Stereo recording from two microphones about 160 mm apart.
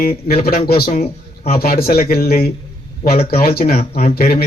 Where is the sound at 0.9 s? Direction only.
40° left (ahead or behind).